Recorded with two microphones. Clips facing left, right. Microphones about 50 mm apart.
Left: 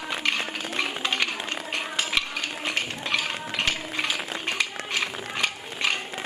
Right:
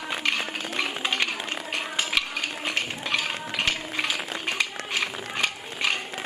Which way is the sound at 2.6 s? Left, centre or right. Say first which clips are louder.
Left 1 dB; centre.